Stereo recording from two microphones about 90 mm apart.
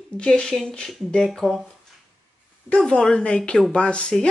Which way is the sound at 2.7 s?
10° left (ahead or behind).